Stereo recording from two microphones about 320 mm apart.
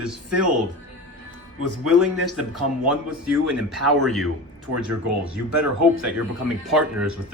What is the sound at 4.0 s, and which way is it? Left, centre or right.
Speech, centre.